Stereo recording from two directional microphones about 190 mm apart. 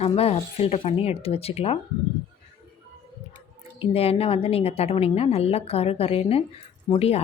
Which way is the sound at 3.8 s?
30° left (ahead or behind).